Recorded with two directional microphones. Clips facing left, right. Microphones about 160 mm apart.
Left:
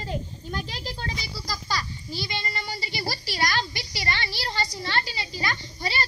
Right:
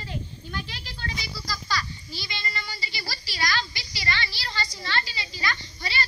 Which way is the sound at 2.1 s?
45° left (ahead or behind).